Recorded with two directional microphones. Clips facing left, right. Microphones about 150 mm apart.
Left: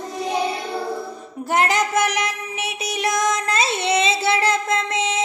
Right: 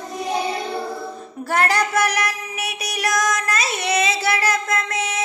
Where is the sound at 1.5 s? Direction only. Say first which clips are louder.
Even; 20° left (ahead or behind).